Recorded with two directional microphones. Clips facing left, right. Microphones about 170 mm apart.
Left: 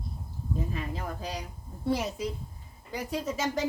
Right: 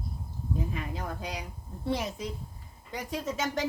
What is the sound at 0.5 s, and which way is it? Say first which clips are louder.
A woman's voice: left 1 dB; centre (ahead or behind).